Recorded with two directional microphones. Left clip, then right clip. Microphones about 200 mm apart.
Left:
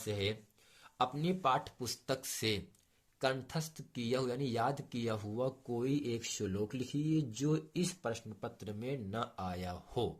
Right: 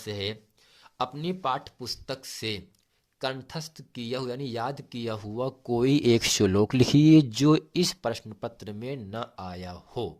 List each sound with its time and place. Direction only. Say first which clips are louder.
0.0 s speech: right 4 dB; 25° right (ahead or behind)
5.7 s speech: right 18 dB; 50° right (ahead or behind); by 10.1 s 20° right (ahead or behind)